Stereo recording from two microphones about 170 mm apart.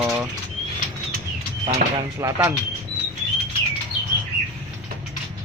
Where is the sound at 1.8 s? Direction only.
55° right (ahead or behind).